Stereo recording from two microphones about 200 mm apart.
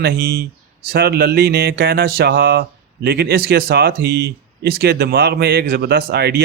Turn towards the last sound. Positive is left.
turn(degrees=-55)  # may be behind; listen again after turning